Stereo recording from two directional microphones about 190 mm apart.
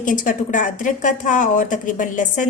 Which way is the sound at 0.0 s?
45° left (ahead or behind).